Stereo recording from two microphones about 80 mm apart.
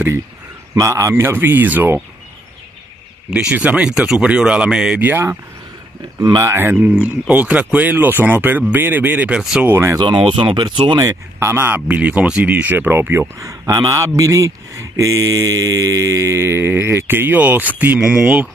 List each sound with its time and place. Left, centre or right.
0.7 s speech: right
3.3 s speech: centre
4.9 s speech: right
6.4 s speech: right
9.3 s speech: centre
9.7 s a man's voice: right
9.9 s speech: right
11.0 s speech: right
13.4 s a man's voice: right; by 18.5 s centre